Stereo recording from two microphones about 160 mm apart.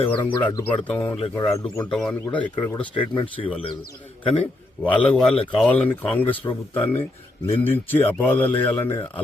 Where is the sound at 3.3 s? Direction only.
35° left (ahead or behind).